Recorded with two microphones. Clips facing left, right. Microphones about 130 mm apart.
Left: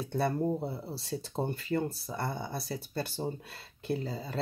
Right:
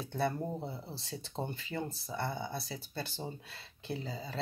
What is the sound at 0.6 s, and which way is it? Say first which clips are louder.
Speech: left 5 dB; 40° left (ahead or behind).